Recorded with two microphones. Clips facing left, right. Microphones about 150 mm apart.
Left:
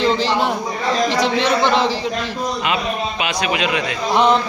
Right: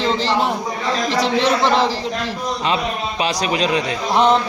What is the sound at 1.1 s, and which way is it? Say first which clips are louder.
Speech: even; 30° right (ahead or behind).